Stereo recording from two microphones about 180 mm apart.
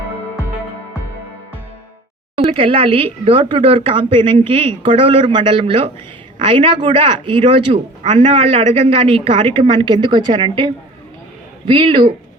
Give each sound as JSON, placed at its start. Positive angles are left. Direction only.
{"t": 2.3, "sound": "speech", "side_deg": -30}